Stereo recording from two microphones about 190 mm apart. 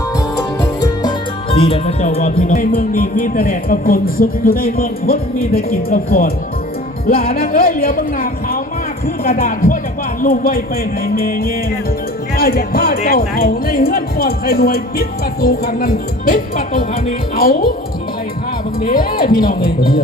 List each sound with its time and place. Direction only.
0.6 s music: 25° left (ahead or behind)
2.4 s speech: 50° left (ahead or behind)
7.3 s speech: 50° left (ahead or behind)
18.8 s speech: 50° left (ahead or behind)